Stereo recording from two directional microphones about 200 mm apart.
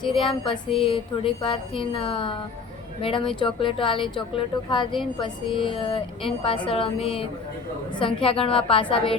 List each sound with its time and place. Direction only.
0.0 s speech: 25° left (ahead or behind)